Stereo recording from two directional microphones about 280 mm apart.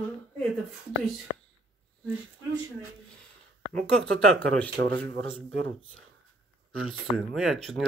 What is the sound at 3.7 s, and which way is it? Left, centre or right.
Speech, centre.